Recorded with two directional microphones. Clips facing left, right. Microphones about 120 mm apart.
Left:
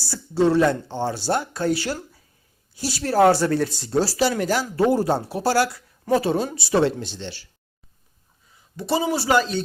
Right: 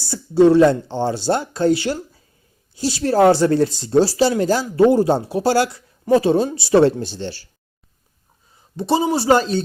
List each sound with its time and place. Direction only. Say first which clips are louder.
0.0 s a man's voice: right 7 dB; 20° right (ahead or behind)
0.6 s speech: right 6 dB; 30° right (ahead or behind)
6.8 s speech: right 6 dB; 40° right (ahead or behind)
8.7 s speech: right 4 dB; 25° right (ahead or behind)